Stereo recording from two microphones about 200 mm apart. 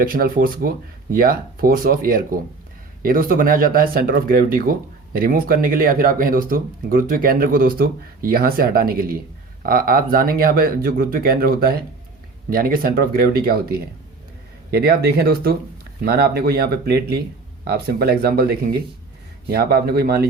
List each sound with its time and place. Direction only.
0.0 s speech: 45° right (ahead or behind)